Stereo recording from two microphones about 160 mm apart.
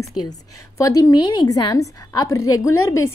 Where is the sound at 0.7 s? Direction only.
20° left (ahead or behind).